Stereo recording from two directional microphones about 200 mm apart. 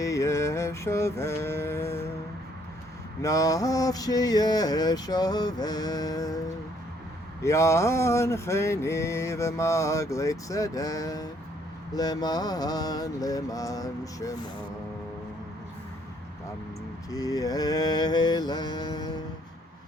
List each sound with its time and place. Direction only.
0.0 s mantra: 15° left (ahead or behind)
3.2 s mantra: 15° left (ahead or behind)
7.4 s mantra: 15° left (ahead or behind)
17.1 s mantra: 15° left (ahead or behind)